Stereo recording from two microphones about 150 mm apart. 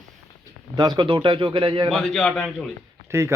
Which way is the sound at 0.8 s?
30° right (ahead or behind).